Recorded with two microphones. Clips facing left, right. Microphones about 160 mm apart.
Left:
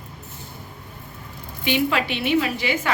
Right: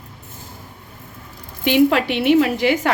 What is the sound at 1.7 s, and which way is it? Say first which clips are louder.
A woman's voice: right 7 dB; 55° right (ahead or behind).